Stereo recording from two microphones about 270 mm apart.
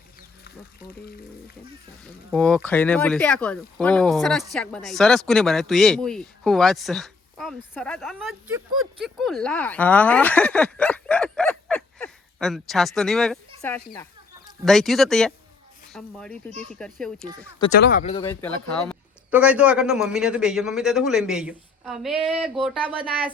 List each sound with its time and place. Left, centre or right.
2.3 s speech: centre
17.7 s speech: left
18.0 s speech: left
18.3 s speech: centre